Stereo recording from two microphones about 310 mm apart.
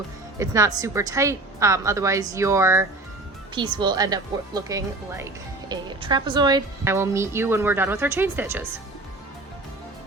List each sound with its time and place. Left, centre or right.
0.3 s speech: centre